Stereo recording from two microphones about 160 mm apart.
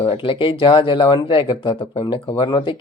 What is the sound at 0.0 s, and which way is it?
Speech, 35° left (ahead or behind).